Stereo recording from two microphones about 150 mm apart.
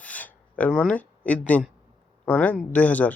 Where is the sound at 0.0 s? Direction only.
10° left (ahead or behind).